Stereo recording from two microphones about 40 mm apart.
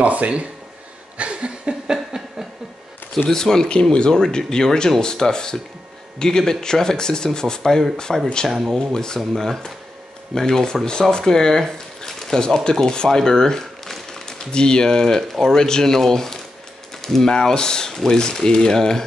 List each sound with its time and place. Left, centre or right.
0.0 s speech: right
1.1 s a sound: right
2.0 s a sound: centre
3.3 s speech: centre
8.1 s speech: centre
8.7 s speech: centre
17.0 s mechanisms: centre
17.3 s speech: centre